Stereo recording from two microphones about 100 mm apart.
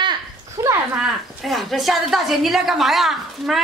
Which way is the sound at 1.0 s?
Centre (ahead or behind).